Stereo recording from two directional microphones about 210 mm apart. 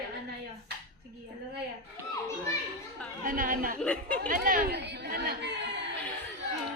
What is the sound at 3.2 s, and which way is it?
Speech, 40° right (ahead or behind).